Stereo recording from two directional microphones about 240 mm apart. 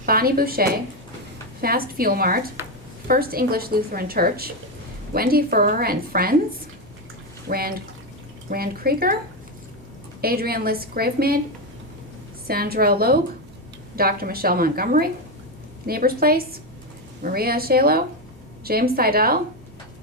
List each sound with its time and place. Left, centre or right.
0.0 s a woman's voice: right
7.4 s a woman's voice: right
10.2 s a woman's voice: right
12.5 s a woman's voice: right